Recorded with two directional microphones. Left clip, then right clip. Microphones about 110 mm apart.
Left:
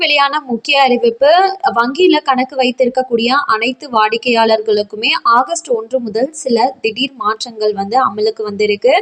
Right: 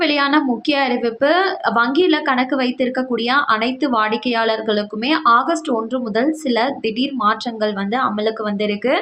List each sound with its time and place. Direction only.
0.0 s a woman's voice: 45° left (ahead or behind)